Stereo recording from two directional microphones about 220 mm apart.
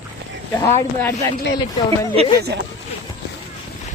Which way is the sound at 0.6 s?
10° left (ahead or behind).